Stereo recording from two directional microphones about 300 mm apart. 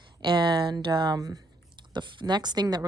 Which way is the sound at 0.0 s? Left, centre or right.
Centre.